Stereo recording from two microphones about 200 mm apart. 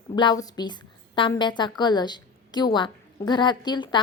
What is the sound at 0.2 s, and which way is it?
A woman's voice, 20° left (ahead or behind).